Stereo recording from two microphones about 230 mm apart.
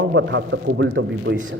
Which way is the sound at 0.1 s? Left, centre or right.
Right.